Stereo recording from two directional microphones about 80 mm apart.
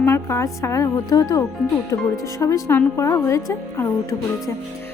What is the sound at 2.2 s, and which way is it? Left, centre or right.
A woman's voice, left.